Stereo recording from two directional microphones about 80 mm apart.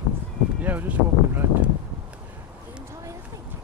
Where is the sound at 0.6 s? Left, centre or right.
Right.